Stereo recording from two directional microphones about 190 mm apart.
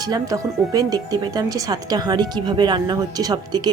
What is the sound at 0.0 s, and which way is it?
Speech, 20° right (ahead or behind).